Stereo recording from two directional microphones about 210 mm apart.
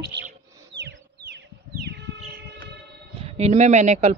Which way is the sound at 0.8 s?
50° right (ahead or behind).